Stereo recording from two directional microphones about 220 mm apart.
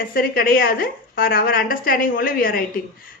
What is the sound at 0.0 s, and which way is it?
A woman's voice, 40° left (ahead or behind).